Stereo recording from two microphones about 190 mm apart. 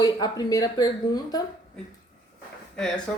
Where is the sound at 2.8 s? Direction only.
5° left (ahead or behind).